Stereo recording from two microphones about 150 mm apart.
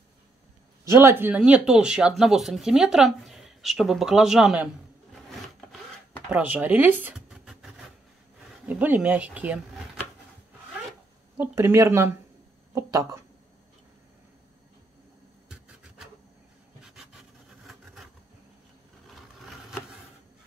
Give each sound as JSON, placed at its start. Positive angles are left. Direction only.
{"t": 0.8, "sound": "speech", "side_deg": -20}
{"t": 5.3, "sound": "zipper", "side_deg": 0}
{"t": 6.4, "sound": "speech", "side_deg": -10}
{"t": 11.3, "sound": "speech", "side_deg": -15}